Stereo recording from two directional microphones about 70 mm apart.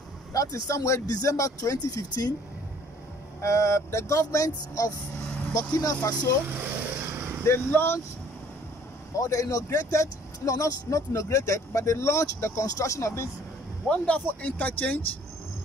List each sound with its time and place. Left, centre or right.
0.3 s speech: left
3.3 s speech: left
7.0 s vehicle: right
7.4 s speech: left
9.1 s speech: left
12.6 s speech: left
13.8 s speech: centre